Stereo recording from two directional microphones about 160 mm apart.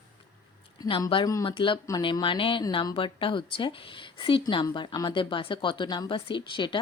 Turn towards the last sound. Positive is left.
turn(degrees=30)  # may be behind; listen again after turning